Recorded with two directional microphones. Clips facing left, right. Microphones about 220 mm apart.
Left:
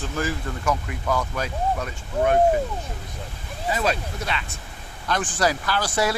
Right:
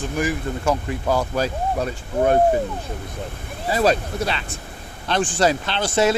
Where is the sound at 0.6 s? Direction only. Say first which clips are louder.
Right 3 dB; 30° right (ahead or behind).